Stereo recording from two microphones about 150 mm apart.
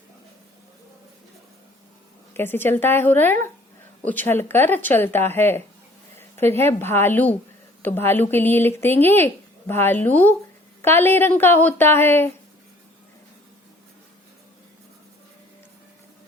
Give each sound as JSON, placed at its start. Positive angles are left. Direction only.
{"t": 2.3, "sound": "a woman's voice", "side_deg": 15}